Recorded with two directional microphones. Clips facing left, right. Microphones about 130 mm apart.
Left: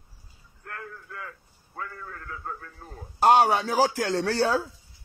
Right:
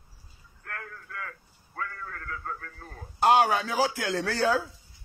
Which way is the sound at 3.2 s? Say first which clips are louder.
Left 2 dB; 35° left (ahead or behind).